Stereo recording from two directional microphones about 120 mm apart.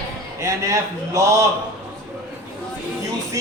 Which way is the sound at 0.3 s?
30° right (ahead or behind).